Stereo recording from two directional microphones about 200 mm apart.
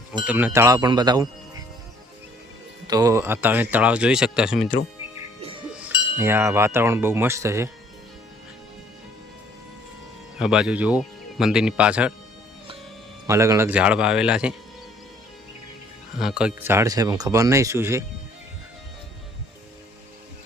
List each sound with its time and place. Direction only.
0.3 s speech: 10° right (ahead or behind)
2.8 s speech: 20° right (ahead or behind)
5.4 s music: 25° right (ahead or behind)
6.1 s speech: 10° right (ahead or behind)
10.3 s speech: 5° right (ahead or behind)
13.2 s speech: 15° right (ahead or behind)
16.1 s speech: 5° right (ahead or behind)